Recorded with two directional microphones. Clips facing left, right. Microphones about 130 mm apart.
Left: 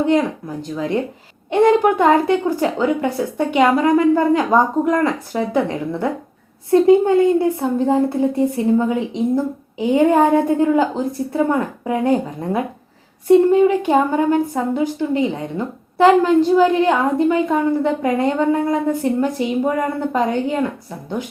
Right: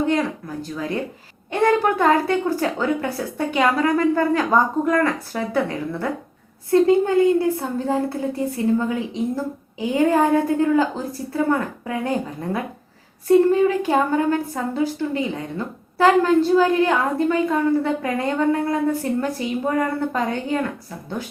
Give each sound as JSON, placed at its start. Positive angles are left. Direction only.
{"t": 0.1, "sound": "a woman's voice", "side_deg": 20}